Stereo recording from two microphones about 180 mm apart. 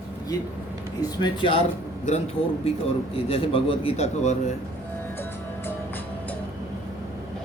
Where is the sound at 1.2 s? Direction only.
30° left (ahead or behind).